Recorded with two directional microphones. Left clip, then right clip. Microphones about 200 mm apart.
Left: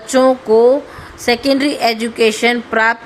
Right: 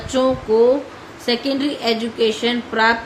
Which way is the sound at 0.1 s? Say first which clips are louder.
Left 6 dB; 50° left (ahead or behind).